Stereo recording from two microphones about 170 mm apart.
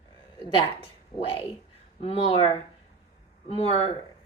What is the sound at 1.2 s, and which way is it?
A woman's voice, 30° left (ahead or behind).